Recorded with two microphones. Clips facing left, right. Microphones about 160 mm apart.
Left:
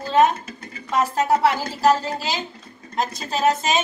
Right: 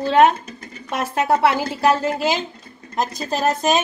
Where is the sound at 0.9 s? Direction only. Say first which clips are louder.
Even; 60° right (ahead or behind).